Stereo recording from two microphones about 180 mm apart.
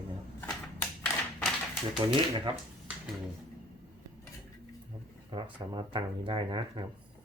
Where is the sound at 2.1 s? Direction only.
25° right (ahead or behind).